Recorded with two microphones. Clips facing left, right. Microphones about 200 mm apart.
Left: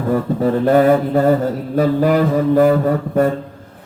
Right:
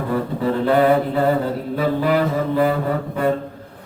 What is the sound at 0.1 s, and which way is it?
Mantra, 45° left (ahead or behind).